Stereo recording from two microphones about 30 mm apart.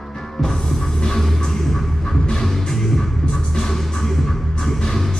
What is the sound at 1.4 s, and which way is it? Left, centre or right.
Music, centre.